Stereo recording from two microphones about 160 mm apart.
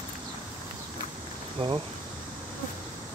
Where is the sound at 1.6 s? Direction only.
35° right (ahead or behind).